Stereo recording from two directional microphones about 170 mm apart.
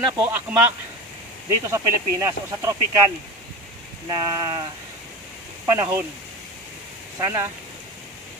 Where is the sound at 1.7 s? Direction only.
20° right (ahead or behind).